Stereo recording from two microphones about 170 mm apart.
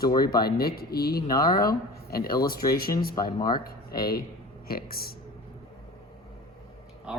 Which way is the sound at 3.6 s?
60° left (ahead or behind).